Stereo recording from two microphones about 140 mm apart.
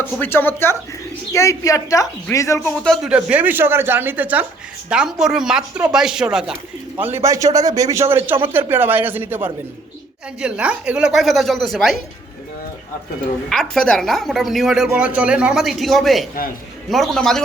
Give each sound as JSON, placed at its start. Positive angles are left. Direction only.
{"t": 0.0, "sound": "a woman's voice", "side_deg": 15}
{"t": 2.8, "sound": "speech", "side_deg": 0}
{"t": 7.0, "sound": "a man's voice", "side_deg": -20}
{"t": 13.5, "sound": "speech", "side_deg": 5}